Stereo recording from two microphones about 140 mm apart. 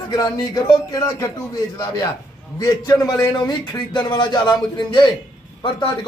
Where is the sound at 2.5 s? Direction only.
25° left (ahead or behind).